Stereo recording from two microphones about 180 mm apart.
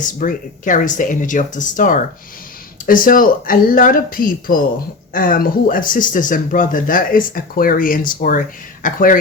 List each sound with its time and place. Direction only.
0.0 s speech: 45° left (ahead or behind)